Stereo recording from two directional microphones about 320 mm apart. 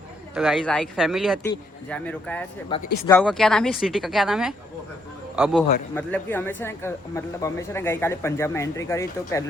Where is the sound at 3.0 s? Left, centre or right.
Centre.